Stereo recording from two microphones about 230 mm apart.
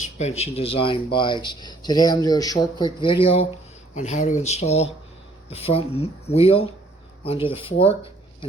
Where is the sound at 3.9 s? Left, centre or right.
Left.